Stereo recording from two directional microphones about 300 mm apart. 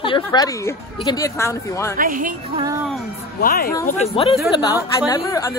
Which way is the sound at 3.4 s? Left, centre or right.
Left.